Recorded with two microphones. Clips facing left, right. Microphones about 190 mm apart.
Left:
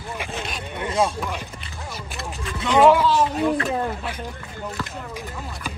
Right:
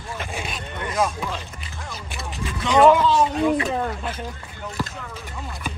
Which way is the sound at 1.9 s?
Centre (ahead or behind).